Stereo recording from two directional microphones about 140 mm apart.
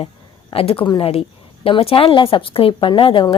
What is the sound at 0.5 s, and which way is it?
A woman's voice, 40° left (ahead or behind).